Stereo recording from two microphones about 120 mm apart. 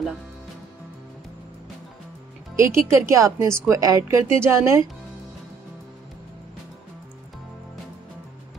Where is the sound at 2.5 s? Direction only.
25° right (ahead or behind).